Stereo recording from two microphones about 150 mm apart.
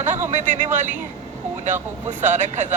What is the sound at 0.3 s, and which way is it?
Speech, 55° right (ahead or behind).